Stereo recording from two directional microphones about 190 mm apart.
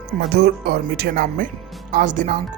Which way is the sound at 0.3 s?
55° right (ahead or behind).